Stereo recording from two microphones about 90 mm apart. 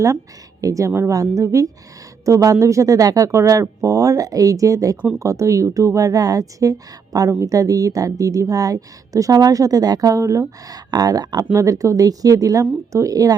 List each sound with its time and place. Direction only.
0.6 s a woman's voice: 40° right (ahead or behind)